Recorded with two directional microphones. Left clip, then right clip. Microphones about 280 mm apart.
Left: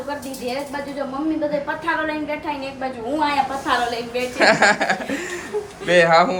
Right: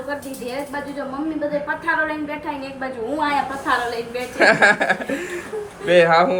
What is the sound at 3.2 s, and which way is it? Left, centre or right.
A woman's voice, centre.